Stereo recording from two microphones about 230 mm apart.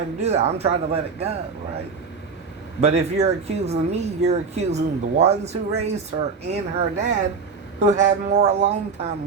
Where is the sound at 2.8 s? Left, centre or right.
Right.